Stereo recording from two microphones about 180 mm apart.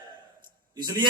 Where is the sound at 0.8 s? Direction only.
25° right (ahead or behind).